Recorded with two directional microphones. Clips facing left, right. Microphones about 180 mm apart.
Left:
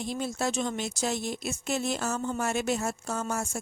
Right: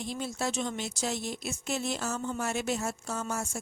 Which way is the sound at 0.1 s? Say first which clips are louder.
Left 3 dB; 50° left (ahead or behind).